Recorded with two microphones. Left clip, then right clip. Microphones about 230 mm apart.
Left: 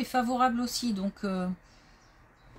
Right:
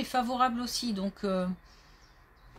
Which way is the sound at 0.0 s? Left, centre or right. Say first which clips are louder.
Left 1 dB; centre.